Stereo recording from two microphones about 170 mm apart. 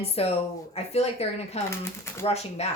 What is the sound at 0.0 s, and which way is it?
A woman's voice, 35° left (ahead or behind).